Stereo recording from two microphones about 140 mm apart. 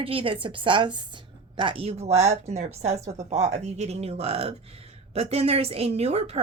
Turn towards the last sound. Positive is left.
turn(degrees=-45)  # may be behind; listen again after turning